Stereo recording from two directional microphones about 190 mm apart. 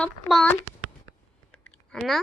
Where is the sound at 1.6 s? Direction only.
Centre (ahead or behind).